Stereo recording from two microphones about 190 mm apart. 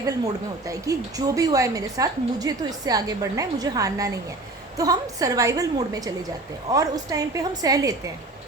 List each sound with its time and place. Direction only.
0.7 s a woman's voice: 20° right (ahead or behind)